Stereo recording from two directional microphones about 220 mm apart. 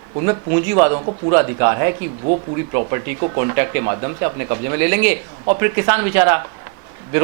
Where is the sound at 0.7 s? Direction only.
20° right (ahead or behind).